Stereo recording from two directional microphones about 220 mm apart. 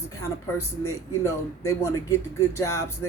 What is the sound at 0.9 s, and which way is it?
Speech, 15° left (ahead or behind).